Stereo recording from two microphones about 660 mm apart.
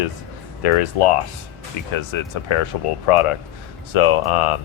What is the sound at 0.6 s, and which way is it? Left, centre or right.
Speech, left.